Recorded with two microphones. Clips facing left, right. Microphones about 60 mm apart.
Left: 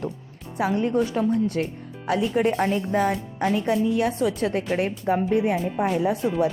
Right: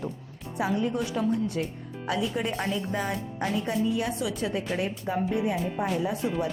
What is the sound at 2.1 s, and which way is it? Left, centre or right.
Speech, left.